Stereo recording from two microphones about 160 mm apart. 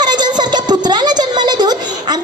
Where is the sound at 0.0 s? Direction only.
25° right (ahead or behind).